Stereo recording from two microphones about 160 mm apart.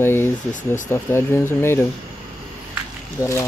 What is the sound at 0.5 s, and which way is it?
Speech, 55° left (ahead or behind).